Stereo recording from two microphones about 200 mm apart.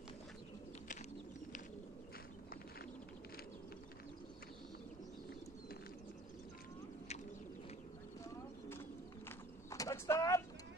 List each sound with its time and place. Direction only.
9.7 s vehicle: 15° left (ahead or behind)